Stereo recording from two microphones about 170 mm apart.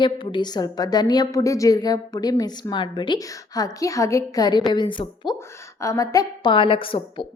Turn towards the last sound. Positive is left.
turn(degrees=30)  # may be behind; listen again after turning